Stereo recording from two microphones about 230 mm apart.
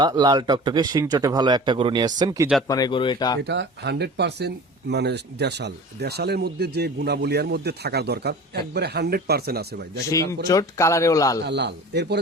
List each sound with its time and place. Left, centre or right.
0.0 s speech: centre
2.6 s speech: centre
3.4 s speech: right
10.4 s speech: centre
11.4 s speech: right